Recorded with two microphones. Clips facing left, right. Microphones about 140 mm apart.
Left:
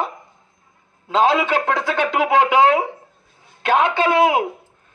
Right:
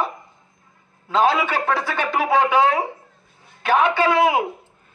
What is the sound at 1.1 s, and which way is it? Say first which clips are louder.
A man's voice: left 2 dB; 20° left (ahead or behind).